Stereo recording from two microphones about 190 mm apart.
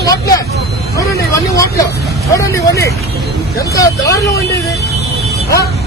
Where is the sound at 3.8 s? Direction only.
15° left (ahead or behind).